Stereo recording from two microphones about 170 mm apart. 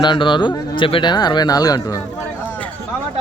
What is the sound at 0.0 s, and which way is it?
A man's voice, 25° left (ahead or behind).